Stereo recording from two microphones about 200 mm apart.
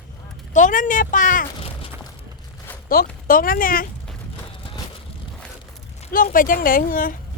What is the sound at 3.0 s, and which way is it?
Speech, 50° left (ahead or behind).